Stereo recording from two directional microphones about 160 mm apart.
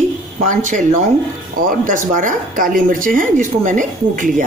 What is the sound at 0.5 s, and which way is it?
A woman's voice, 50° right (ahead or behind).